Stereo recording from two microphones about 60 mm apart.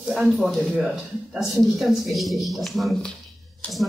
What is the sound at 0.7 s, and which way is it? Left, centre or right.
Speech, centre.